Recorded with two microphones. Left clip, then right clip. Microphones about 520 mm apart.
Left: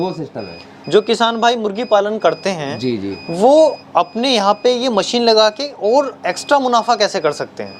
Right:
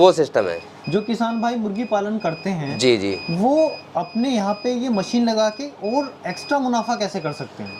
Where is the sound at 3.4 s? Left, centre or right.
Left.